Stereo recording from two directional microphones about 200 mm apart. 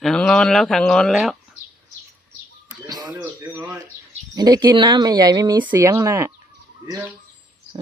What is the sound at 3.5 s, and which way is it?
Speech, 10° right (ahead or behind).